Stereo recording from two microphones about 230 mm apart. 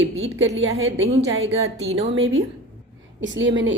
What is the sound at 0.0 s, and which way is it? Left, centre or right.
A woman's voice, right.